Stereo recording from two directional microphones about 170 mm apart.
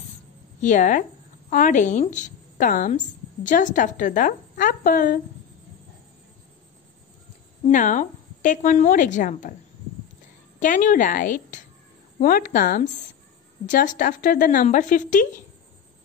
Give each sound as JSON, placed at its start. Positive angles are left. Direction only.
{"t": 0.6, "sound": "a woman's voice", "side_deg": 45}
{"t": 7.6, "sound": "a woman's voice", "side_deg": 50}
{"t": 10.6, "sound": "a woman's voice", "side_deg": 50}